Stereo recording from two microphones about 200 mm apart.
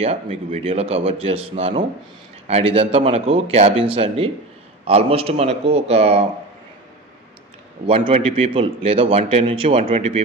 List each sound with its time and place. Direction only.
0.0 s a man's voice: 30° right (ahead or behind)
7.8 s a man's voice: 25° right (ahead or behind)